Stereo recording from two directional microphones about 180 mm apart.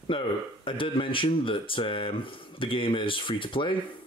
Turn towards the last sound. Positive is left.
turn(degrees=30)  # may be behind; listen again after turning